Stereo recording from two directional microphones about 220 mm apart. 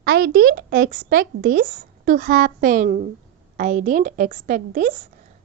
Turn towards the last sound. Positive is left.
turn(degrees=-35)  # may be behind; listen again after turning